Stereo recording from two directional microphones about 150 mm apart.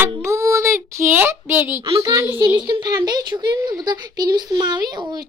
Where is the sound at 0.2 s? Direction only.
20° right (ahead or behind).